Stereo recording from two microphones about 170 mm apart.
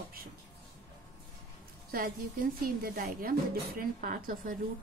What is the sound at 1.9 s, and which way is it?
Speech, 55° right (ahead or behind).